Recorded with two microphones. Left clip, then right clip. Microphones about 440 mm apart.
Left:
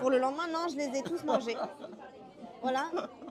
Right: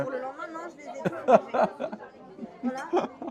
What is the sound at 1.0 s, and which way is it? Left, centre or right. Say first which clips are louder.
Speech: right 14 dB; right.